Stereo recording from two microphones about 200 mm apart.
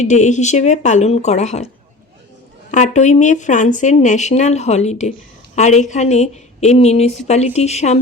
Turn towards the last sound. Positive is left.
turn(degrees=35)  # may be behind; listen again after turning